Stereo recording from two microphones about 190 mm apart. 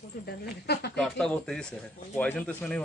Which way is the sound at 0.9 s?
5° left (ahead or behind).